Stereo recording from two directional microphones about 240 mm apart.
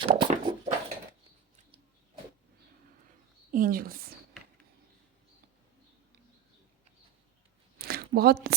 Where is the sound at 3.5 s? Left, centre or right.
Right.